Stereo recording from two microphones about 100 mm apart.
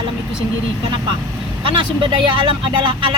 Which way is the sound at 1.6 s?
55° right (ahead or behind).